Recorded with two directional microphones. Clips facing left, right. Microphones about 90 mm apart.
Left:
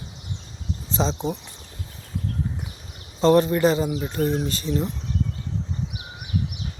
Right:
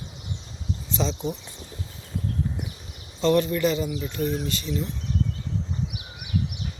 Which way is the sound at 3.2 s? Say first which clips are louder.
Left 4 dB; 35° left (ahead or behind).